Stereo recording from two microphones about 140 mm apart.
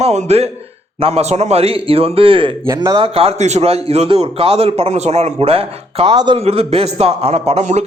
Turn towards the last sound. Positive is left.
turn(degrees=-50)  # may be behind; listen again after turning